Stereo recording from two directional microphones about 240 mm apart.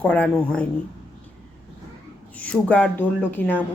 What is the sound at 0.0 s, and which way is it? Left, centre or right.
Speech, centre.